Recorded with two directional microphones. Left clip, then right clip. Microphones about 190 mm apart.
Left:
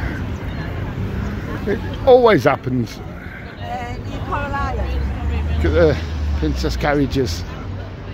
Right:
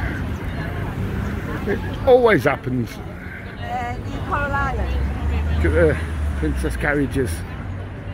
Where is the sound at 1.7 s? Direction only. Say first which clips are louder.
Left 3 dB; 20° left (ahead or behind).